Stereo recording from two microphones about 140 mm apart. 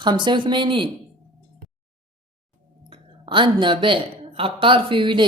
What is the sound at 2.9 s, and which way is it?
Speech, 35° right (ahead or behind).